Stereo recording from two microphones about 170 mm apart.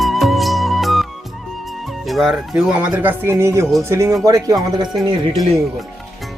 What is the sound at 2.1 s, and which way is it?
A man's voice, centre (ahead or behind).